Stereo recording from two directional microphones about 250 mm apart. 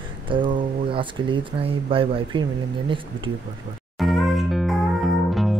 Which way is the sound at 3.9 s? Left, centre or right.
Centre.